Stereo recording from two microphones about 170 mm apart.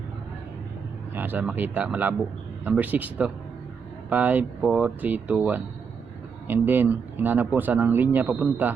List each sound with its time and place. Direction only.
1.1 s speech: 10° right (ahead or behind)